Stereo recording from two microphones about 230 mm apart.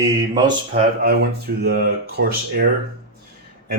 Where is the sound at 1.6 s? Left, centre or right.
Right.